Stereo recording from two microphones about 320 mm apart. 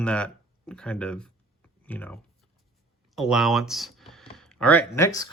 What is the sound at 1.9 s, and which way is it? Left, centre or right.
Speech, centre.